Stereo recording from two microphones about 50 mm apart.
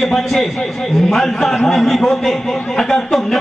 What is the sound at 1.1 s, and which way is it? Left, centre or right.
Speech, centre.